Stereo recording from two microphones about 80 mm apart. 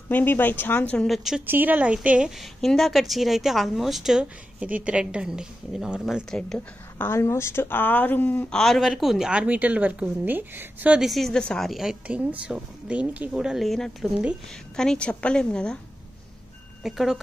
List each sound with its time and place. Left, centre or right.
0.1 s a woman's voice: left
1.0 s a woman's voice: centre
1.4 s a woman's voice: right; by 6.2 s centre
7.0 s a woman's voice: left
8.5 s a woman's voice: centre
9.3 s speech: centre
11.0 s a woman's voice: centre
11.7 s speech: centre
13.3 s a woman's voice: centre
16.8 s a woman's voice: centre